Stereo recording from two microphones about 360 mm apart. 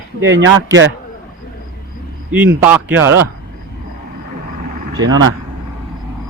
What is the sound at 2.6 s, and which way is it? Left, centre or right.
Speech, centre.